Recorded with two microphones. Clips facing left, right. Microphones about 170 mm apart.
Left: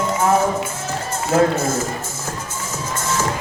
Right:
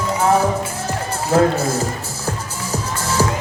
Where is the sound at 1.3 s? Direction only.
35° right (ahead or behind).